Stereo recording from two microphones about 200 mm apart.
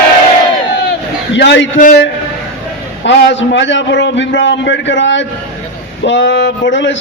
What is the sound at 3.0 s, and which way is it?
A man's voice, 65° left (ahead or behind).